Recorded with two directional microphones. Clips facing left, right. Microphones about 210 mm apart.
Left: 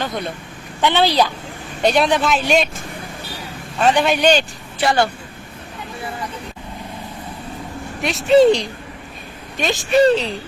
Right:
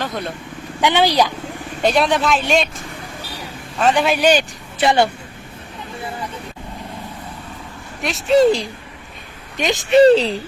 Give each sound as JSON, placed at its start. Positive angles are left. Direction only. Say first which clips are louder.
{"t": 0.8, "sound": "speech", "louder": "even", "side_deg": -15}
{"t": 1.8, "sound": "speech", "louder": "left 1 dB", "side_deg": 0}
{"t": 3.8, "sound": "speech", "louder": "even", "side_deg": 0}
{"t": 4.8, "sound": "a woman's voice", "louder": "right 2 dB", "side_deg": -20}
{"t": 8.0, "sound": "speech", "louder": "left 2 dB", "side_deg": 0}
{"t": 9.6, "sound": "a woman's voice", "louder": "right 3 dB", "side_deg": -15}